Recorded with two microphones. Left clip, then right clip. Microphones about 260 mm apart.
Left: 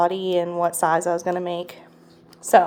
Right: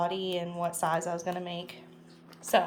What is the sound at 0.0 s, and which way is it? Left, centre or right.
A woman's voice, centre.